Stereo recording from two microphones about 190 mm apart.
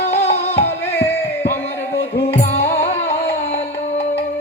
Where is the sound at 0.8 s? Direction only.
10° left (ahead or behind).